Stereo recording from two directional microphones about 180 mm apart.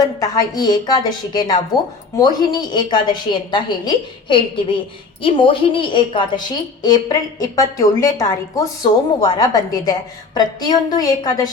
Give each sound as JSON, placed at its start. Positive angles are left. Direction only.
{"t": 0.2, "sound": "a woman's voice", "side_deg": 20}